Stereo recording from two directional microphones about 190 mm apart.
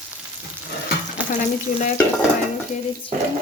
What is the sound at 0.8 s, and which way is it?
Stir, 40° left (ahead or behind).